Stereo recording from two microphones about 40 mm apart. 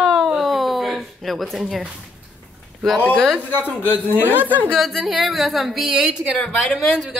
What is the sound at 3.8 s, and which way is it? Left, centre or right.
Speech, left.